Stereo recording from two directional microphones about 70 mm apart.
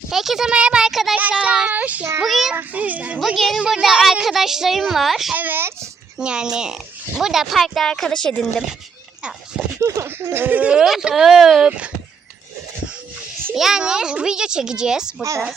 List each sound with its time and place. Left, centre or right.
0.1 s speech: centre
1.1 s speech: centre
1.7 s child singing: right
2.2 s a child's voice: centre
2.6 s a child's voice: right
3.2 s a child's voice: centre
5.3 s a child's voice: right
6.1 s a child's voice: centre
9.2 s speech: centre
9.8 s speech: right
10.2 s speech: right
10.7 s a child's voice: centre
13.5 s speech: centre
15.2 s speech: right